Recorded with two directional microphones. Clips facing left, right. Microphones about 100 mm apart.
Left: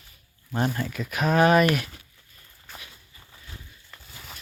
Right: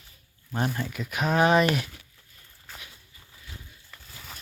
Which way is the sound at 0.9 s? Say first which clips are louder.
Left 2 dB; 15° right (ahead or behind).